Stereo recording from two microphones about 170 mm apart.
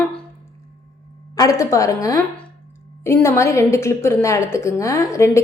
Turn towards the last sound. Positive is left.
turn(degrees=15)  # may be behind; listen again after turning